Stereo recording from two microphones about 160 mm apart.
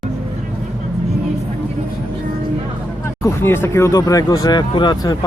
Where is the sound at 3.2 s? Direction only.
15° left (ahead or behind).